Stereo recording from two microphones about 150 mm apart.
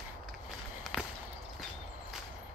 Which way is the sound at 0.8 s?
Centre (ahead or behind).